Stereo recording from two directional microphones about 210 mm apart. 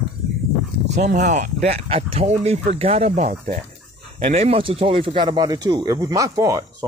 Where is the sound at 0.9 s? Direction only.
35° right (ahead or behind).